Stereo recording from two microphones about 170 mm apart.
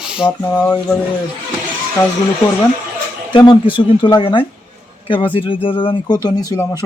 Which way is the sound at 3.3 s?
30° left (ahead or behind).